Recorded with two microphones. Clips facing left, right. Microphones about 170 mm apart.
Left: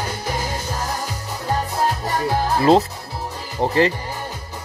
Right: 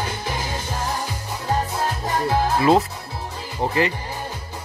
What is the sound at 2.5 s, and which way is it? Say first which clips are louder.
Speech: left 4 dB; 35° left (ahead or behind).